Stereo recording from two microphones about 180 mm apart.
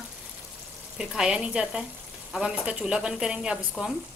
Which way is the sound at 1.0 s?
5° right (ahead or behind).